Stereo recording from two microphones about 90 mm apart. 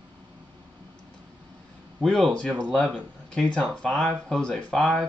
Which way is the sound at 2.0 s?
10° left (ahead or behind).